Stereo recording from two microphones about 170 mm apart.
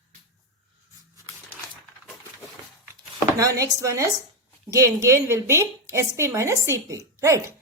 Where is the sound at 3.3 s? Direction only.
20° right (ahead or behind).